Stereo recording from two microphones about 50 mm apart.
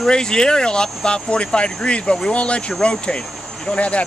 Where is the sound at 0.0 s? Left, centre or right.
Centre.